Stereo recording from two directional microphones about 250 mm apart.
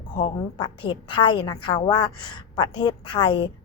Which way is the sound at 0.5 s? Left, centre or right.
Centre.